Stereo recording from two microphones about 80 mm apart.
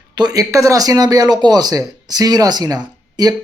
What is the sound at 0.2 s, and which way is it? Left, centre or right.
Speech, right.